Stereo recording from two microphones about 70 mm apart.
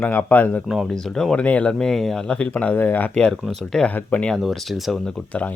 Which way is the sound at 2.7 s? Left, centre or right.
Left.